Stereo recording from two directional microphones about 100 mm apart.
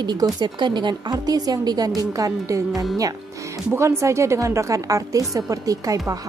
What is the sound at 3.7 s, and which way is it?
A woman's voice, 30° right (ahead or behind).